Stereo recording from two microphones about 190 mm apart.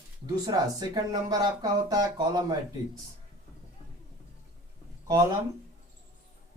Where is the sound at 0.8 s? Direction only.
20° right (ahead or behind).